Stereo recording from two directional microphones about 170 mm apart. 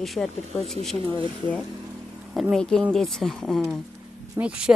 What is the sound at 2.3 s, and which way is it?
Speech, centre (ahead or behind).